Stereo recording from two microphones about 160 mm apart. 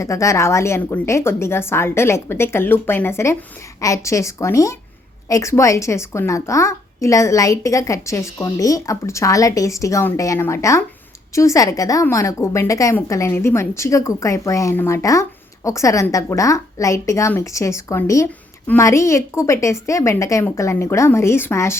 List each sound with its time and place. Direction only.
0.0 s a woman's voice: 20° left (ahead or behind)